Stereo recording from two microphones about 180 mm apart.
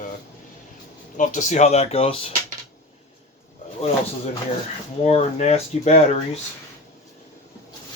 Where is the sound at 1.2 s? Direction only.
45° left (ahead or behind).